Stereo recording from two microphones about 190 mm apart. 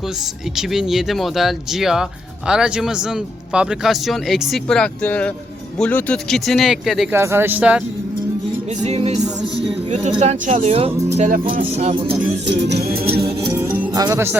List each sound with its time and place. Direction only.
0.5 s speech: centre (ahead or behind)
7.1 s speech: 15° right (ahead or behind)
8.8 s speech: 35° right (ahead or behind)
11.2 s music: 45° right (ahead or behind)
11.5 s speech: 35° right (ahead or behind)
12.5 s music: 60° right (ahead or behind)
13.5 s music: 10° right (ahead or behind)
13.9 s speech: 20° right (ahead or behind)